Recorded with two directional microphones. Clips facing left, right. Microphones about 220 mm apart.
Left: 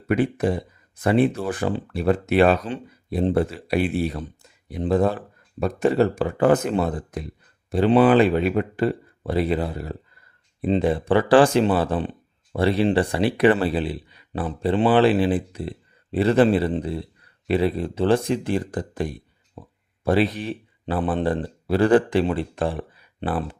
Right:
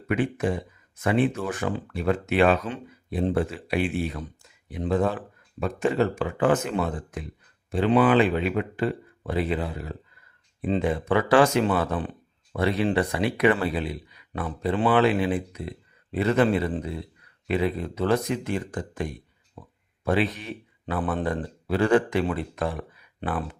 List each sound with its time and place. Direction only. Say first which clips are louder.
0.1 s speech: left 4 dB; 35° left (ahead or behind)
19.6 s a sound: left 4 dB; 25° left (ahead or behind)
20.1 s speech: left 4 dB; 35° left (ahead or behind)